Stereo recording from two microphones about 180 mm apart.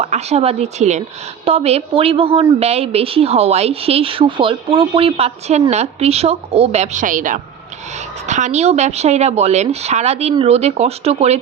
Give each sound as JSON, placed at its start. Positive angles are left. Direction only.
{"t": 0.0, "sound": "a woman's voice", "side_deg": -35}